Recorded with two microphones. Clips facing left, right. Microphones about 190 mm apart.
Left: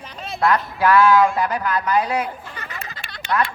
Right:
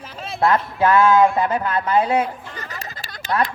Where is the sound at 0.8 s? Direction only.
25° right (ahead or behind).